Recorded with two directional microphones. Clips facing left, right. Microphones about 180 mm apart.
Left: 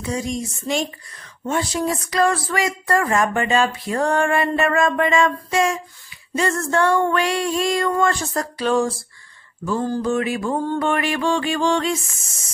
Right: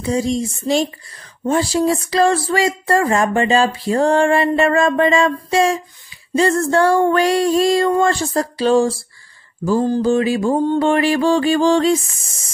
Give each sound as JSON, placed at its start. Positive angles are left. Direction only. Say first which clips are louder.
{"t": 0.0, "sound": "speech", "louder": "right 6 dB", "side_deg": -30}
{"t": 9.7, "sound": "mantra", "louder": "right 6 dB", "side_deg": -25}
{"t": 10.8, "sound": "speech", "louder": "right 6 dB", "side_deg": -30}